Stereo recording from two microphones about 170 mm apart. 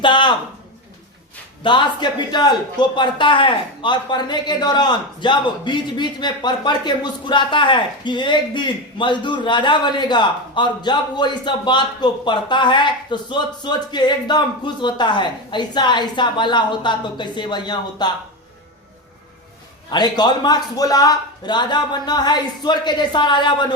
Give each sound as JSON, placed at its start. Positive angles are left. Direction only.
{"t": 0.0, "sound": "a man's voice", "side_deg": 25}
{"t": 1.6, "sound": "speech", "side_deg": 25}
{"t": 19.9, "sound": "speech", "side_deg": 25}